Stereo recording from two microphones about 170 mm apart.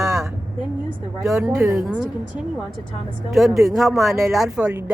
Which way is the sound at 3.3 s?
Centre (ahead or behind).